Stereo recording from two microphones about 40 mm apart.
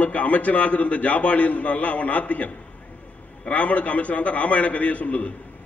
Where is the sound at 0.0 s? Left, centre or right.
Left.